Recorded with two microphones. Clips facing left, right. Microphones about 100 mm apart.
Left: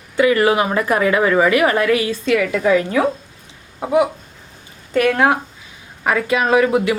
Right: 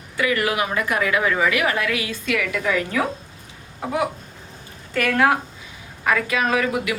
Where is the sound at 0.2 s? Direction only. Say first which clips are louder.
Left 7 dB; 30° left (ahead or behind).